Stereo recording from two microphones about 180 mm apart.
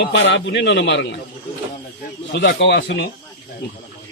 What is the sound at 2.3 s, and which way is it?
Speech, 70° left (ahead or behind).